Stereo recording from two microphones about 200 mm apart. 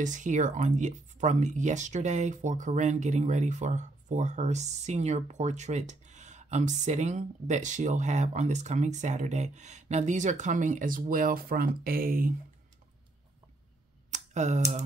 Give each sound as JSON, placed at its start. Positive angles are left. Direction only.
{"t": 0.0, "sound": "speech", "side_deg": -40}
{"t": 14.1, "sound": "speech", "side_deg": -35}